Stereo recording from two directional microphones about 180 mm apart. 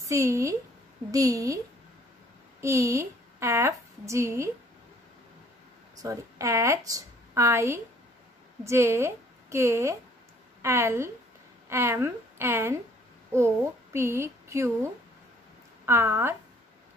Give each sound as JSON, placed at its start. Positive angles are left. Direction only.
{"t": 0.0, "sound": "a woman's voice", "side_deg": -15}
{"t": 2.6, "sound": "a woman's voice", "side_deg": -15}
{"t": 6.0, "sound": "a woman's voice", "side_deg": -15}
{"t": 13.9, "sound": "speech", "side_deg": -15}
{"t": 15.8, "sound": "a woman's voice", "side_deg": -15}